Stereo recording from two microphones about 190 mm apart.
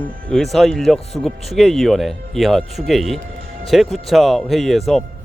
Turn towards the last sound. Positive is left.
turn(degrees=0)  # may be behind; listen again after turning